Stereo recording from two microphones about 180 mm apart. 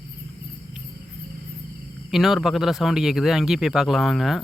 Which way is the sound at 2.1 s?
Centre (ahead or behind).